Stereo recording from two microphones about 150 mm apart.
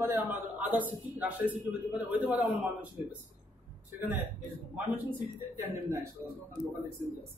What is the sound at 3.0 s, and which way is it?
Speech, 55° left (ahead or behind).